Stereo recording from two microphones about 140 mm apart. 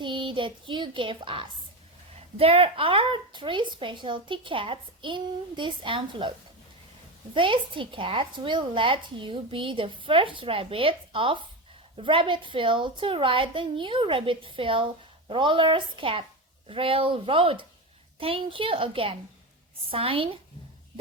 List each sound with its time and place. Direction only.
0.0 s child singing: 35° right (ahead or behind)
2.1 s a woman's voice: 45° right (ahead or behind)
7.3 s a woman's voice: 35° right (ahead or behind)